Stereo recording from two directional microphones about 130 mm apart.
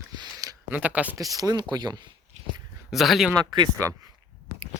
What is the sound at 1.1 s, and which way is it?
Speech, 25° right (ahead or behind).